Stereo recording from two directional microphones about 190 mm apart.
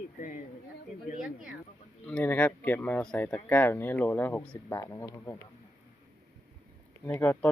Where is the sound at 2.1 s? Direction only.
5° left (ahead or behind).